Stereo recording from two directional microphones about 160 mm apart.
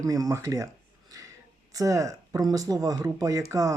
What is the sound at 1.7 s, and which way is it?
Speech, 20° right (ahead or behind).